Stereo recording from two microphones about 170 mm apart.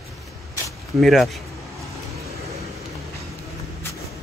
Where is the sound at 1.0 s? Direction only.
Centre (ahead or behind).